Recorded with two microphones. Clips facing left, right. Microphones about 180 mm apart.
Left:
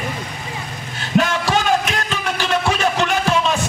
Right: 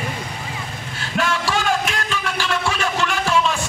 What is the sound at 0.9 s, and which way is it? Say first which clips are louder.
Music: left 5 dB; 20° left (ahead or behind).